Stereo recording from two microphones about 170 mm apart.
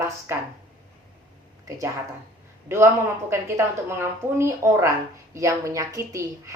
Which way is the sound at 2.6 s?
15° right (ahead or behind).